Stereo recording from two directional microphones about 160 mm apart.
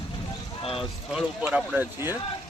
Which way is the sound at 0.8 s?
5° right (ahead or behind).